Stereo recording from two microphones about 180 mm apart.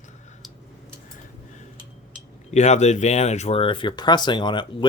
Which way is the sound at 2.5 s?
40° left (ahead or behind).